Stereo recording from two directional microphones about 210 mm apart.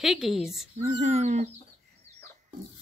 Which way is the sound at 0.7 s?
30° right (ahead or behind).